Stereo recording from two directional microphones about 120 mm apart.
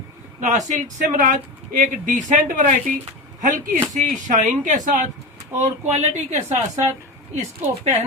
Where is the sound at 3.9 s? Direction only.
90° right.